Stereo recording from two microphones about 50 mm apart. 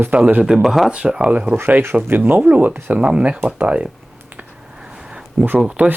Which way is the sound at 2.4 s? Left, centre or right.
Right.